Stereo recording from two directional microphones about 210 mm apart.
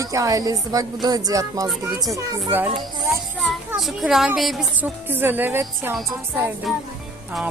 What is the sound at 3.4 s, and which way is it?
A woman's voice, centre (ahead or behind).